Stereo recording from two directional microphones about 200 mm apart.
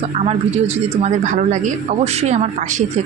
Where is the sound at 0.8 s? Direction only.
35° right (ahead or behind).